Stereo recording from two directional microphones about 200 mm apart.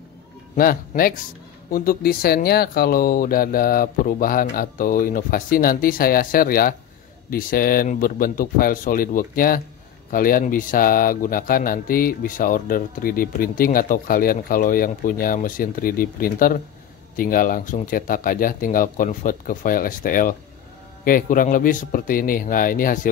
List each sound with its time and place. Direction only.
0.6 s speech: 45° left (ahead or behind)